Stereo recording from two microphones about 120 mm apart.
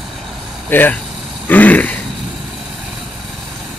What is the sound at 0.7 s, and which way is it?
Speech, 15° left (ahead or behind).